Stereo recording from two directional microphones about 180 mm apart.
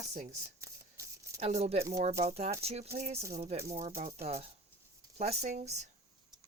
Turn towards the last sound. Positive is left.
turn(degrees=-40)  # may be behind; listen again after turning